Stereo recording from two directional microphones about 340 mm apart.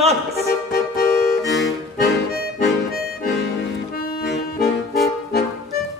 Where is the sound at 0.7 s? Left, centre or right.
Left.